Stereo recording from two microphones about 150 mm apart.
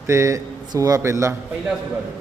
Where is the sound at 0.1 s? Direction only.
20° right (ahead or behind).